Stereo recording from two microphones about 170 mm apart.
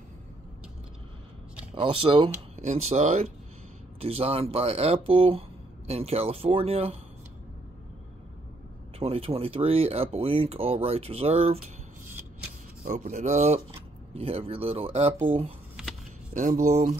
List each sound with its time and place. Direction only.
1.8 s speech: 30° right (ahead or behind)
9.0 s speech: 35° right (ahead or behind)
12.8 s speech: 45° right (ahead or behind)
15.8 s a sound: 5° right (ahead or behind)
16.3 s speech: 50° right (ahead or behind)